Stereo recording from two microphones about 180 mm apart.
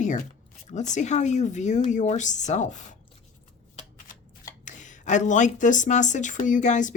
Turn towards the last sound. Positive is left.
turn(degrees=45)  # may be behind; listen again after turning